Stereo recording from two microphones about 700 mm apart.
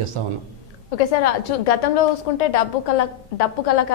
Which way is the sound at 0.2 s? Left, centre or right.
Right.